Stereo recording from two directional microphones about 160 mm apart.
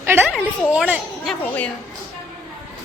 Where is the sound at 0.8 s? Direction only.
5° right (ahead or behind).